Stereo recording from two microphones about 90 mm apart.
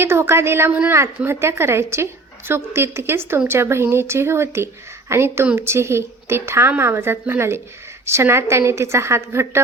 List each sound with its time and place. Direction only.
0.0 s a woman's voice: 30° right (ahead or behind)
0.7 s a woman's voice: 15° right (ahead or behind)
0.9 s a woman's voice: 30° right (ahead or behind)